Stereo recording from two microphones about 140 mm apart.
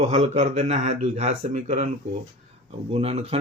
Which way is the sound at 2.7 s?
45° right (ahead or behind).